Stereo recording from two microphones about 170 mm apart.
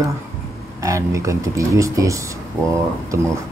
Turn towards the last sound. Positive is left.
turn(degrees=-15)  # may be behind; listen again after turning